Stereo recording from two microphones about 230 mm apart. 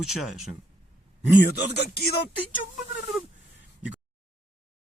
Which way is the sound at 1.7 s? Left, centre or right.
Left.